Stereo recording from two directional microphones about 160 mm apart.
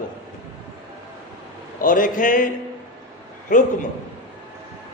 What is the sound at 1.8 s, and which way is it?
Speech, 55° left (ahead or behind).